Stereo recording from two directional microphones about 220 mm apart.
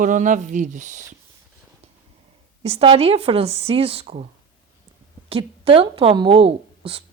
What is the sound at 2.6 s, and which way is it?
Speech, 25° right (ahead or behind).